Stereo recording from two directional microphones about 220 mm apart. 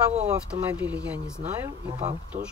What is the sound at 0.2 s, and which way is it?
Speech, 5° right (ahead or behind).